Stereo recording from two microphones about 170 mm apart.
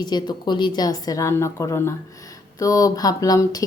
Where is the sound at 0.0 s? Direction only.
25° left (ahead or behind).